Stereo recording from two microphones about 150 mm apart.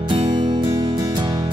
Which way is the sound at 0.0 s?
35° right (ahead or behind).